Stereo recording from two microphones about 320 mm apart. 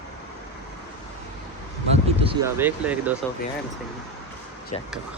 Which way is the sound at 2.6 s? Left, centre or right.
Centre.